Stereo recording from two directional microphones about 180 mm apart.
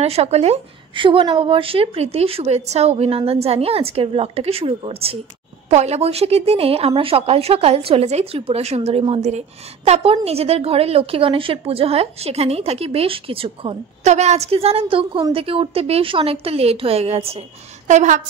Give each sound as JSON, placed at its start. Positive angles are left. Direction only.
{"t": 0.0, "sound": "a woman's voice", "side_deg": -35}